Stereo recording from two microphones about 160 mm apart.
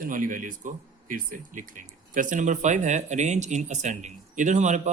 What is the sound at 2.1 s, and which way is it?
Speech, 55° right (ahead or behind).